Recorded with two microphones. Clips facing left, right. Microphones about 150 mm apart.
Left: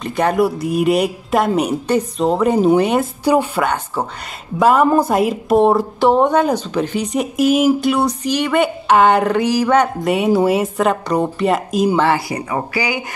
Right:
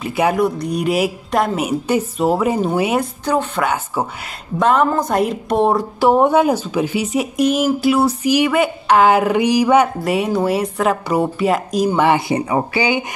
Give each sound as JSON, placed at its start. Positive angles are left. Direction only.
{"t": 0.0, "sound": "a woman's voice", "side_deg": -5}
{"t": 3.3, "sound": "speech", "side_deg": 10}
{"t": 3.6, "sound": "a sound", "side_deg": -10}
{"t": 4.6, "sound": "a woman's voice", "side_deg": 5}
{"t": 9.4, "sound": "a sound", "side_deg": -15}
{"t": 10.0, "sound": "a woman's voice", "side_deg": 0}
{"t": 12.0, "sound": "speech", "side_deg": -20}